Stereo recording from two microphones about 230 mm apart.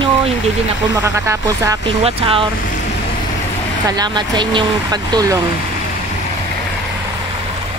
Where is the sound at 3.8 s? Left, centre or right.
Centre.